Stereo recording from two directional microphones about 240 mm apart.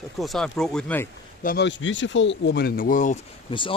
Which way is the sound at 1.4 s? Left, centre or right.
Left.